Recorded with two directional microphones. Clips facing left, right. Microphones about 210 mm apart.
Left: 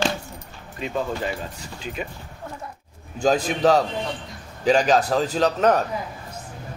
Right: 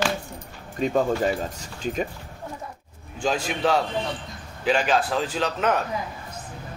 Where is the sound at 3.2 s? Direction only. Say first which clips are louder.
Left 5 dB; 40° left (ahead or behind).